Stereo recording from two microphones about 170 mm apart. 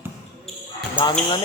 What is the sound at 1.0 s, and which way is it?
Speech, 30° left (ahead or behind).